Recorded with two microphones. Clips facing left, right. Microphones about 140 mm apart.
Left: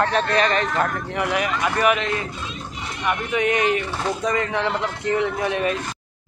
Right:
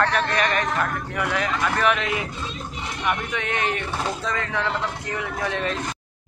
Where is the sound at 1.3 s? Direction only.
10° left (ahead or behind).